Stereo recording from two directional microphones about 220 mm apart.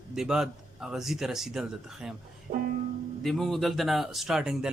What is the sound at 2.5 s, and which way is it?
Music, 35° right (ahead or behind).